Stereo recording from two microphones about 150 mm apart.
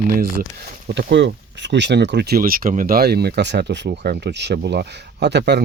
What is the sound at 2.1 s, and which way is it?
Speech, 90° right.